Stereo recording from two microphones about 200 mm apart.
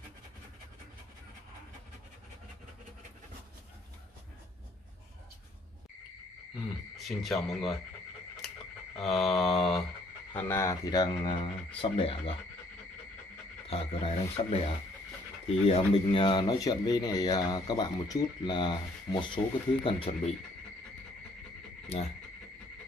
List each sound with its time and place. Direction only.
7.0 s mantra: centre (ahead or behind)
8.9 s mantra: centre (ahead or behind)
10.3 s speech: 15° left (ahead or behind)
13.7 s speech: 30° left (ahead or behind)
21.9 s speech: 30° left (ahead or behind)